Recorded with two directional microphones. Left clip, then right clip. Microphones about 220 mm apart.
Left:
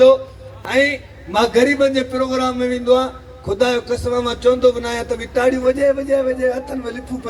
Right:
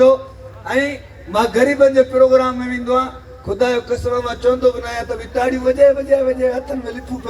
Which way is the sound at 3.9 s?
45° left (ahead or behind).